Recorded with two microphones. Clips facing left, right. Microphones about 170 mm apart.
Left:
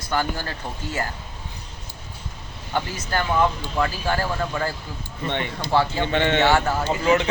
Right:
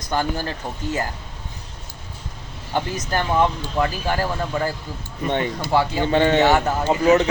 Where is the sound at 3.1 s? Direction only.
20° right (ahead or behind).